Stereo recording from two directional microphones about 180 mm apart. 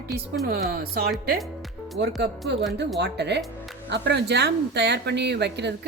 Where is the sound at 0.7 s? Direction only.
55° right (ahead or behind).